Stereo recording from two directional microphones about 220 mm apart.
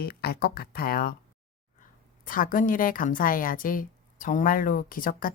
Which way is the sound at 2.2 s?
40° left (ahead or behind).